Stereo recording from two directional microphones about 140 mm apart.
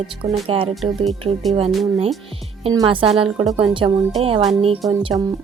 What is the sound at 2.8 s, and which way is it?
Speech, 40° right (ahead or behind).